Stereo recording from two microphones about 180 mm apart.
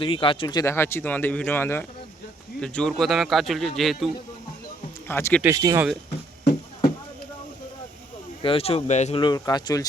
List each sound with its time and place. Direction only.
0.0 s a man's voice: 30° left (ahead or behind); by 4.1 s centre (ahead or behind)
5.0 s speech: 10° left (ahead or behind)
5.4 s speech: 15° right (ahead or behind)
8.4 s speech: 30° left (ahead or behind)
9.2 s speech: 25° left (ahead or behind)